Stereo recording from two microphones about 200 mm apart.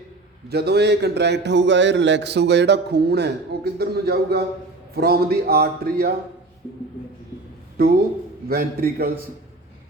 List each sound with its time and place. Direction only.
0.4 s a man's voice: 55° right (ahead or behind)
8.4 s speech: 50° right (ahead or behind)